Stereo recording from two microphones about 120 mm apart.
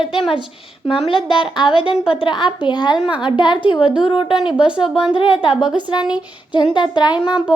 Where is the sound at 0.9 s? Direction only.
50° left (ahead or behind).